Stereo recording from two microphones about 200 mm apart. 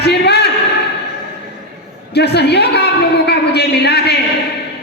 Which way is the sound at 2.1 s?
55° left (ahead or behind).